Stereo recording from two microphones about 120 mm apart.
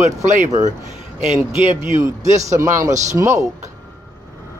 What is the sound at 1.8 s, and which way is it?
A man's voice, 25° right (ahead or behind).